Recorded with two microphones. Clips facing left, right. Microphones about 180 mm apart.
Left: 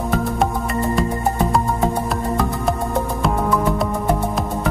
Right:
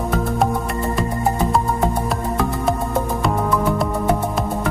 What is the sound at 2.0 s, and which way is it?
Music, centre (ahead or behind).